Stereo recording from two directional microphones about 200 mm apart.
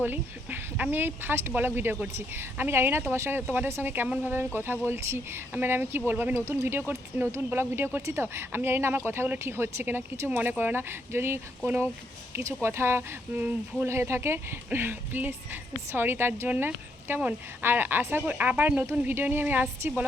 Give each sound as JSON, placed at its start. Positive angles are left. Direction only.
{"t": 0.0, "sound": "speech", "side_deg": -10}